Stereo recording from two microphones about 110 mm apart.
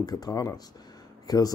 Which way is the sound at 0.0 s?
35° left (ahead or behind).